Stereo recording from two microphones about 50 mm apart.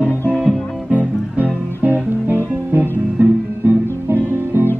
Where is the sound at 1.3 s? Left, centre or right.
Right.